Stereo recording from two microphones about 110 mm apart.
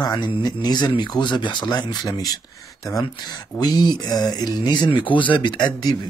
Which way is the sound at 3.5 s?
40° left (ahead or behind).